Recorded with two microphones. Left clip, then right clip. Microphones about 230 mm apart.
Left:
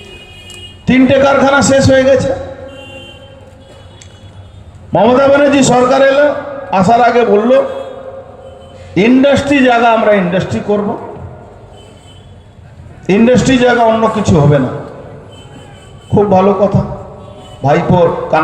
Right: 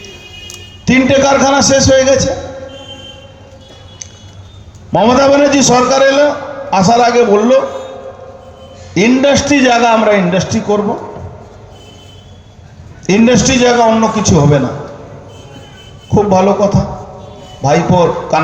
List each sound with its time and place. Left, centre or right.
0.5 s a man's voice: right
4.9 s a man's voice: right
9.0 s a man's voice: right
13.1 s a man's voice: right
16.0 s a man's voice: right